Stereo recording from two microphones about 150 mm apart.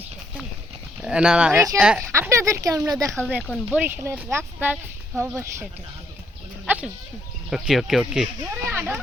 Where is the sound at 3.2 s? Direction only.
5° left (ahead or behind).